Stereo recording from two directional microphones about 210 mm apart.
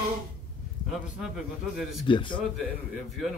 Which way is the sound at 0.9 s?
Centre (ahead or behind).